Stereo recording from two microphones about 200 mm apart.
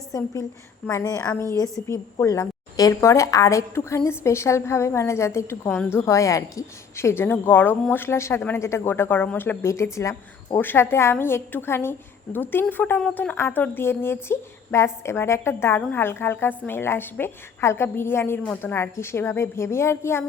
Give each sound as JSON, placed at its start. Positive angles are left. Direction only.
{"t": 0.1, "sound": "a woman's voice", "side_deg": 15}